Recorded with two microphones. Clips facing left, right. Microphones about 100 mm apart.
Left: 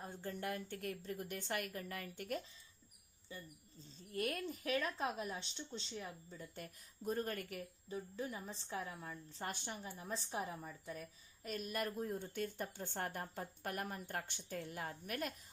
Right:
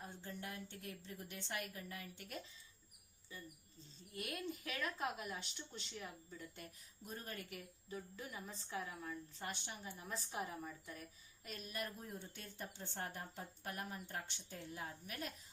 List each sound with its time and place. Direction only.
0.0 s a woman's voice: 45° left (ahead or behind)
3.3 s speech: 30° left (ahead or behind)
4.1 s speech: 45° left (ahead or behind); by 6.1 s 25° left (ahead or behind)
6.6 s a woman's voice: 45° left (ahead or behind)
7.9 s speech: 30° left (ahead or behind)
11.4 s a woman's voice: 50° left (ahead or behind)